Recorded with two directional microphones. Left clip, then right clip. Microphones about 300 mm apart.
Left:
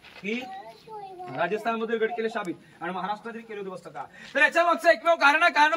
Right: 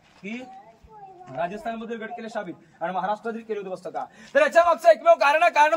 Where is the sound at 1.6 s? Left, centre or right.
Centre.